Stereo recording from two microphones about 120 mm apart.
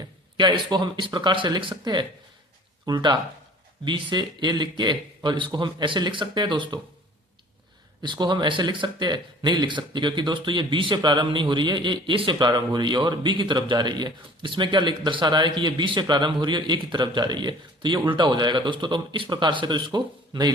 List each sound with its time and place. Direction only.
0.0 s speech: 40° right (ahead or behind)
8.0 s speech: 40° right (ahead or behind)